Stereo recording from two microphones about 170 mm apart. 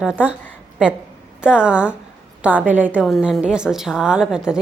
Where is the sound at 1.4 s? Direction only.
5° right (ahead or behind).